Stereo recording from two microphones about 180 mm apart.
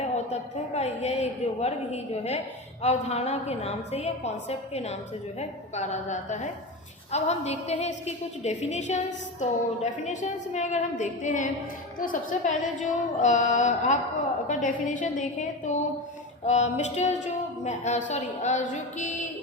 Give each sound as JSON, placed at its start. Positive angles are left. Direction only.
{"t": 0.3, "sound": "a woman's voice", "side_deg": 35}